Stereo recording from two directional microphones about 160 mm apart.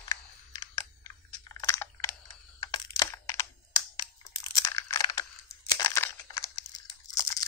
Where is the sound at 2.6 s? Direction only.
25° left (ahead or behind).